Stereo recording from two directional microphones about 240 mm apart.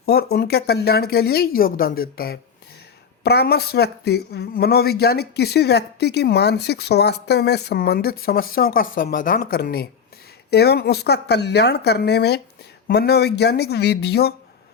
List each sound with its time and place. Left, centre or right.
0.0 s speech: left